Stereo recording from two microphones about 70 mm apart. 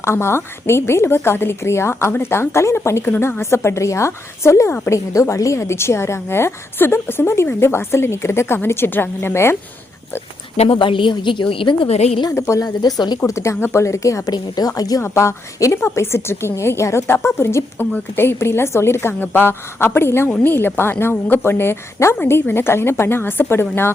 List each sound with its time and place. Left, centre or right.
0.0 s a woman's voice: left
11.3 s a woman's voice: left
12.3 s speech: left
12.6 s speech: left
13.2 s speech: left
14.3 s a woman's voice: left
14.8 s a woman's voice: left
15.0 s a woman's voice: left